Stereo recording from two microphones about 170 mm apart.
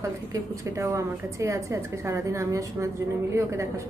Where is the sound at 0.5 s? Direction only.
20° right (ahead or behind).